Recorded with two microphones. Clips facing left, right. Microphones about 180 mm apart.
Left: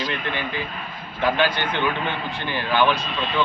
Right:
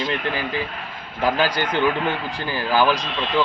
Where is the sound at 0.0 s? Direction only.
35° right (ahead or behind).